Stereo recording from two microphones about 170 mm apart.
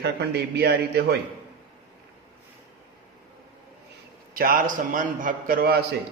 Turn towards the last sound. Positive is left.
turn(degrees=-65)  # may be behind; listen again after turning